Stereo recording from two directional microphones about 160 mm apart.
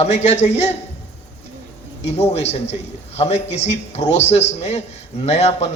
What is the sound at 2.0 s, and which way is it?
A man's voice, 40° left (ahead or behind).